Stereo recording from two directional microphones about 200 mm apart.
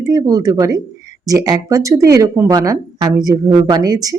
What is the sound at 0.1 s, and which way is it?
Speech, 15° right (ahead or behind).